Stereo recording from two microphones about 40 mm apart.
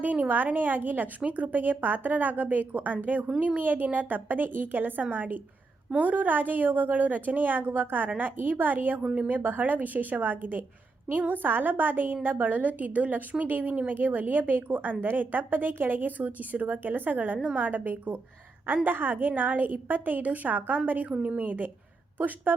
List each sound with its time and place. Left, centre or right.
0.0 s a woman's voice: right
9.0 s speech: right
9.3 s a woman's voice: right